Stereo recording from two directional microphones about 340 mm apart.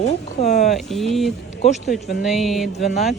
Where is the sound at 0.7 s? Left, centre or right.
Centre.